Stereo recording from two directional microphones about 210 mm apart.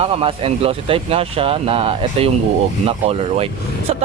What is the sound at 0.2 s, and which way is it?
Speech, 25° right (ahead or behind).